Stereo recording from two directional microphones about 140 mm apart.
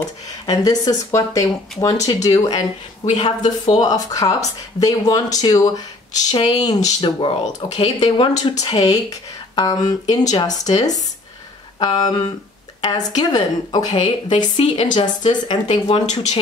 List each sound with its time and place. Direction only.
0.5 s speech: 25° left (ahead or behind)
7.0 s speech: 40° left (ahead or behind)
8.5 s speech: 25° left (ahead or behind)
16.1 s speech: 50° left (ahead or behind)